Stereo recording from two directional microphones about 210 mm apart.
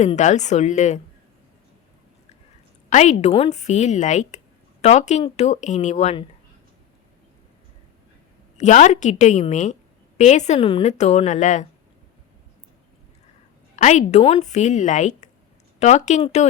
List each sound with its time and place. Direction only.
0.0 s speech: 35° left (ahead or behind)
2.9 s speech: 35° left (ahead or behind)
8.5 s speech: 35° left (ahead or behind)
13.7 s speech: 35° left (ahead or behind)